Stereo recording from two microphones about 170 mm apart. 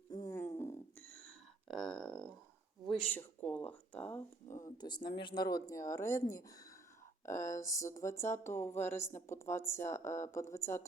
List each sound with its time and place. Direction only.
0.1 s a sound: 20° left (ahead or behind); by 2.2 s centre (ahead or behind)
2.8 s speech: 5° left (ahead or behind)
4.6 s speech: 25° left (ahead or behind)